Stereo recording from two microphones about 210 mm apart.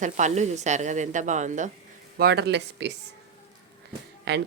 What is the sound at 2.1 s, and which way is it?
Speech, 50° right (ahead or behind).